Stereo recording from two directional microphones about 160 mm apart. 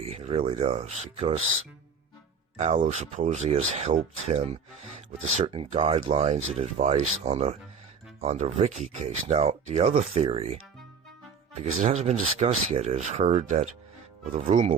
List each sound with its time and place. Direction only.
0.0 s speech: 40° right (ahead or behind)
2.6 s speech: 40° right (ahead or behind)
11.6 s speech: 45° right (ahead or behind)